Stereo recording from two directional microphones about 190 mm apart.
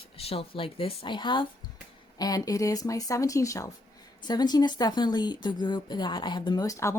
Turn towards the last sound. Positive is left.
turn(degrees=15)  # may be behind; listen again after turning